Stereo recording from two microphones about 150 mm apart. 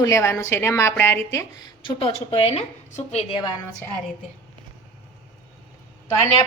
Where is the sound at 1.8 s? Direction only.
40° left (ahead or behind).